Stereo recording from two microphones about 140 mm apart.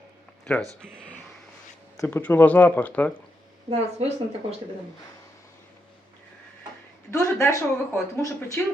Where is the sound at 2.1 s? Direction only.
10° left (ahead or behind).